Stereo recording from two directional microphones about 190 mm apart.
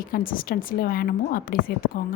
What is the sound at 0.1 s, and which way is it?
A woman's voice, 50° left (ahead or behind).